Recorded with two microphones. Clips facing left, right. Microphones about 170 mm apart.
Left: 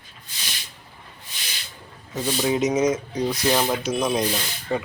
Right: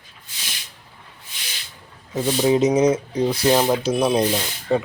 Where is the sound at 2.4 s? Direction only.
30° right (ahead or behind).